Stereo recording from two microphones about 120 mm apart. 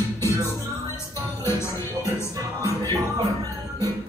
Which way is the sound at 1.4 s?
20° left (ahead or behind).